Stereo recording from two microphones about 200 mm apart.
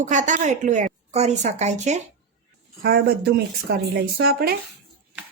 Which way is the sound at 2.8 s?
50° right (ahead or behind).